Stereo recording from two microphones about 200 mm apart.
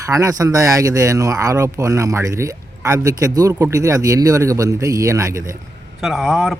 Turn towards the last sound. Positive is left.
turn(degrees=0)  # may be behind; listen again after turning